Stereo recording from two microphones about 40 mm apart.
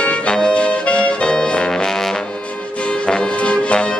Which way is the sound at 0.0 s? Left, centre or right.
Left.